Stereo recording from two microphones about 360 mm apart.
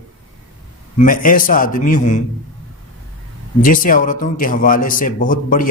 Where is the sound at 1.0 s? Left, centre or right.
Left.